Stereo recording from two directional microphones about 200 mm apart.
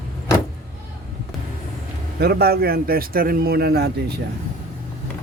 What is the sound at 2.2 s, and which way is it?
Speech, 50° right (ahead or behind).